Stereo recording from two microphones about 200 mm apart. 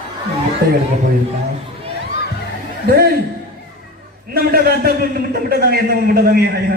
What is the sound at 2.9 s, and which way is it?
Speech, 50° right (ahead or behind).